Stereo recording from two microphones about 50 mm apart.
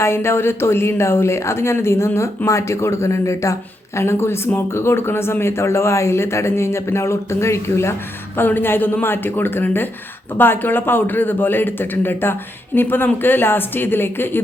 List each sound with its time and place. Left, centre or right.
0.0 s speech: left
8.4 s speech: left